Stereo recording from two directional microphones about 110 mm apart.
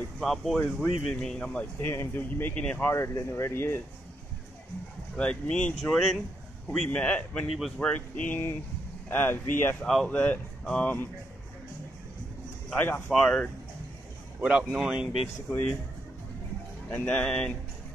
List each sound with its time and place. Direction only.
0.2 s speech: centre (ahead or behind)
2.9 s speech: 25° left (ahead or behind)
5.1 s speech: 10° left (ahead or behind)
7.9 s speech: 15° left (ahead or behind)
9.8 s speech: 5° left (ahead or behind)
10.0 s speech: 15° left (ahead or behind)
12.6 s speech: 15° left (ahead or behind)
14.4 s speech: 10° right (ahead or behind)
16.9 s speech: 10° left (ahead or behind)